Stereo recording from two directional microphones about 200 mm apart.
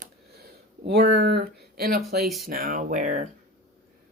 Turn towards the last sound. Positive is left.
turn(degrees=-40)  # may be behind; listen again after turning